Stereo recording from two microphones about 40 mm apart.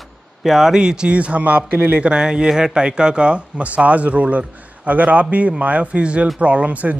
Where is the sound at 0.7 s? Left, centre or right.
Centre; by 2.1 s right.